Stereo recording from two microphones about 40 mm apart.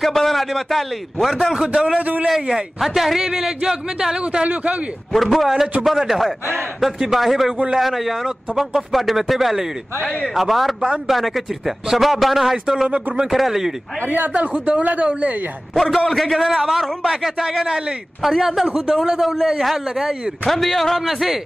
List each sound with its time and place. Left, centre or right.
0.0 s a man's voice: centre
1.5 s a man's voice: centre
2.0 s a man's voice: right
2.5 s a man's voice: centre
3.2 s speech: centre
5.1 s a man's voice: centre
12.8 s speech: centre
13.3 s a man's voice: centre
14.0 s speech: right
14.3 s a man's voice: right
15.7 s a man's voice: centre
20.4 s a man's voice: centre